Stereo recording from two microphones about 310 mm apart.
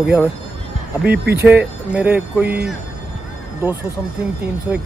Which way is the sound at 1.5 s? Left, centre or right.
Centre.